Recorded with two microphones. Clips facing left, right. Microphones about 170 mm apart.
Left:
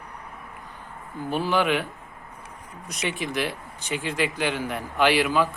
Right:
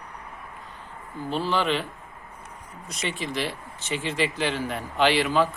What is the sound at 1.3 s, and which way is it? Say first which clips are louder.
Speech: left 2 dB; 15° left (ahead or behind).